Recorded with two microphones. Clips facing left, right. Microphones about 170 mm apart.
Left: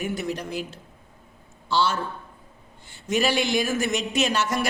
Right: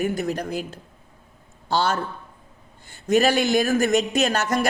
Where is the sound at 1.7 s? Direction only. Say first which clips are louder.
Right 1 dB; 45° right (ahead or behind).